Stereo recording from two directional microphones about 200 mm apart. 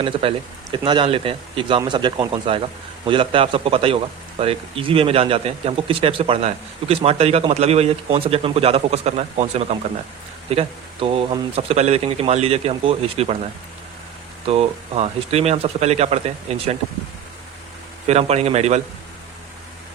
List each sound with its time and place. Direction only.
0.0 s a man's voice: 25° right (ahead or behind)
14.4 s speech: 30° right (ahead or behind)
18.0 s speech: 30° right (ahead or behind)